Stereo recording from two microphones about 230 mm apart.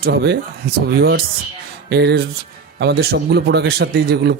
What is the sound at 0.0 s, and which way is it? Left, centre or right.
A man's voice, right.